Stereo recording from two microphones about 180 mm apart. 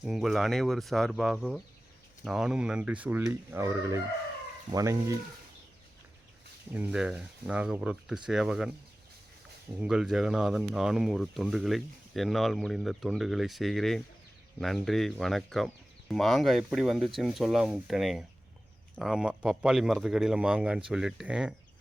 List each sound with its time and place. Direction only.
0.0 s speech: centre (ahead or behind)
2.2 s chicken: 5° right (ahead or behind)
6.7 s speech: 5° right (ahead or behind)
9.7 s speech: 5° right (ahead or behind)